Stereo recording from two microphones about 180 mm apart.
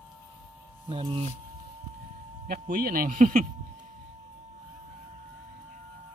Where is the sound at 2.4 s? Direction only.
50° right (ahead or behind).